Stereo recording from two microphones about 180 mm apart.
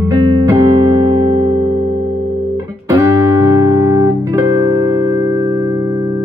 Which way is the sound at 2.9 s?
15° right (ahead or behind).